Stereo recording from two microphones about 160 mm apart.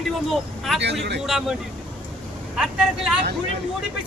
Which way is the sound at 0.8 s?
90° right.